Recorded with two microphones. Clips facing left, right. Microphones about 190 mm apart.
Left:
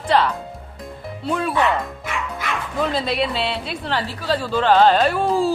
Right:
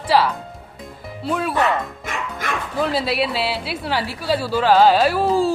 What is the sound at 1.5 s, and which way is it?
Music, 45° right (ahead or behind).